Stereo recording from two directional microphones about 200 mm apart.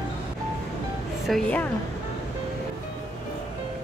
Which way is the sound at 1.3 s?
5° left (ahead or behind).